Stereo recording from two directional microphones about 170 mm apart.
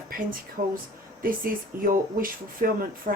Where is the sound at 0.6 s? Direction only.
45° right (ahead or behind).